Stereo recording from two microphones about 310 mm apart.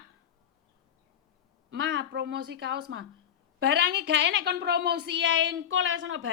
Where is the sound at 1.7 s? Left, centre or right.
Right.